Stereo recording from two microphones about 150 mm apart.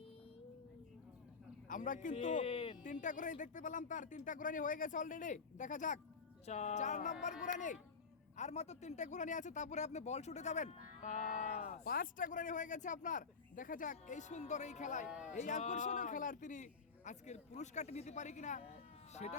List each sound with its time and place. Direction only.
1.6 s a man's voice: 60° left (ahead or behind)
2.4 s speech: 40° left (ahead or behind)
2.8 s a man's voice: 60° left (ahead or behind)